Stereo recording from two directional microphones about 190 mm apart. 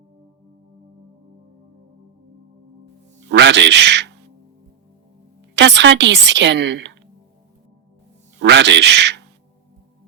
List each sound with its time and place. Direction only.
3.2 s a man's voice: 65° right (ahead or behind)
5.5 s a woman's voice: 65° right (ahead or behind)
8.4 s a man's voice: 70° right (ahead or behind)